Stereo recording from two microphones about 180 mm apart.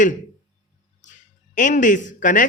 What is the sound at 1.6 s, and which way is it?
Speech, 45° left (ahead or behind).